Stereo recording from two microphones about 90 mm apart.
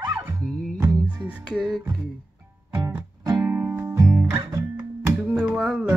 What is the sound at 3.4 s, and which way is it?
Music, 25° right (ahead or behind).